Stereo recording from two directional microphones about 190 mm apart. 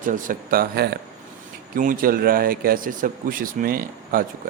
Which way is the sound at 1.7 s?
45° right (ahead or behind).